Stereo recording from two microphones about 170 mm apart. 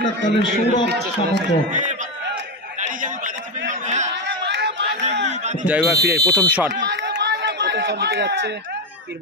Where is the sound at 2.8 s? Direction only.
50° right (ahead or behind).